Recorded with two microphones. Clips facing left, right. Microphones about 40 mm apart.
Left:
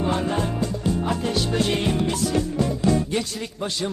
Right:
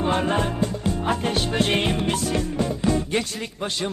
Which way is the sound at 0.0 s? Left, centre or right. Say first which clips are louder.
Right 2 dB; right.